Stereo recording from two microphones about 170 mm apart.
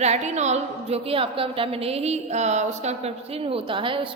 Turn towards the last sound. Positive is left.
turn(degrees=-30)  # may be behind; listen again after turning